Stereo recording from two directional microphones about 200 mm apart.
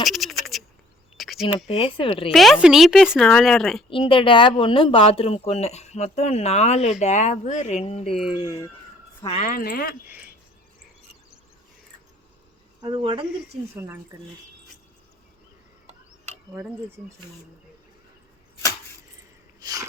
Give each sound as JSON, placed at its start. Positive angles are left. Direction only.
{"t": 0.0, "sound": "bird", "side_deg": 0}
{"t": 1.1, "sound": "a sound", "side_deg": 0}
{"t": 1.6, "sound": "speech", "side_deg": 30}
{"t": 2.3, "sound": "speech", "side_deg": 0}
{"t": 3.8, "sound": "speech", "side_deg": 25}
{"t": 9.4, "sound": "speech", "side_deg": 45}
{"t": 10.1, "sound": "cricket", "side_deg": -5}
{"t": 12.8, "sound": "speech", "side_deg": -25}
{"t": 13.7, "sound": "speech", "side_deg": -10}
{"t": 15.9, "sound": "a sound", "side_deg": -35}
{"t": 19.6, "sound": "a sound", "side_deg": -20}